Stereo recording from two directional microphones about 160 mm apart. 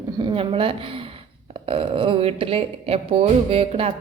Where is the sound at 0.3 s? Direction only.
35° right (ahead or behind).